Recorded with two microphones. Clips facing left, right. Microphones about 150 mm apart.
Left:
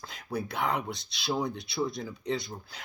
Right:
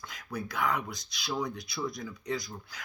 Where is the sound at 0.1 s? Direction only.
30° left (ahead or behind).